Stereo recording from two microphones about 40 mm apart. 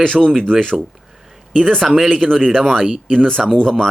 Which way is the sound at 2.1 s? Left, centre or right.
Centre.